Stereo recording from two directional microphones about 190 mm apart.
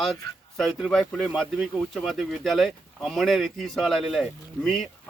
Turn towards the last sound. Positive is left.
turn(degrees=0)  # may be behind; listen again after turning